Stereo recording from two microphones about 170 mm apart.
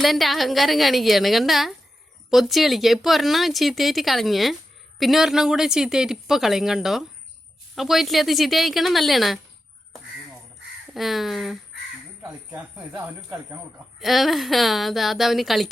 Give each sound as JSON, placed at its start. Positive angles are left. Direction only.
{"t": 0.0, "sound": "speech", "side_deg": 0}
{"t": 10.9, "sound": "speech", "side_deg": 0}
{"t": 14.0, "sound": "speech", "side_deg": 0}